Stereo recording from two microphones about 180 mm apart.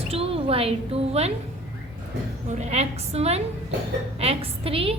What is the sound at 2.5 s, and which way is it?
A woman's voice, 40° right (ahead or behind).